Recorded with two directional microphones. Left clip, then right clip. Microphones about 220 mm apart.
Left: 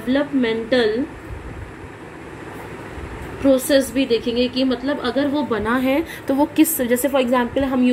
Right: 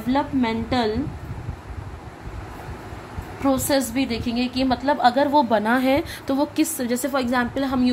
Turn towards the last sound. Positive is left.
turn(degrees=-30)  # may be behind; listen again after turning